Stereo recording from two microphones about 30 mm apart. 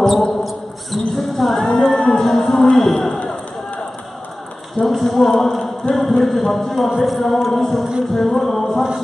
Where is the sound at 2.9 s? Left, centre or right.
Centre.